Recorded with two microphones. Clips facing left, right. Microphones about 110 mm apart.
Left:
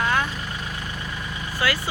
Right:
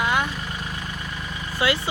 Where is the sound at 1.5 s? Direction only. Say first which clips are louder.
Right 2 dB; 20° right (ahead or behind).